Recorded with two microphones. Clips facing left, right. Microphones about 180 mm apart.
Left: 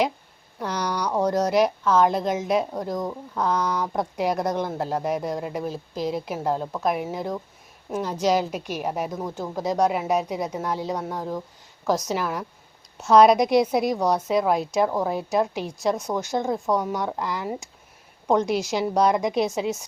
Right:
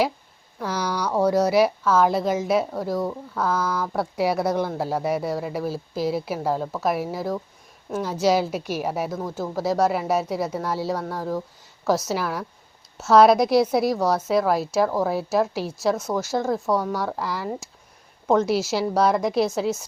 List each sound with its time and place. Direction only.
0.6 s a woman's voice: 5° right (ahead or behind)
10.9 s speech: 15° left (ahead or behind)
11.9 s speech: 5° right (ahead or behind)
16.7 s speech: 20° left (ahead or behind)
17.0 s speech: 5° right (ahead or behind)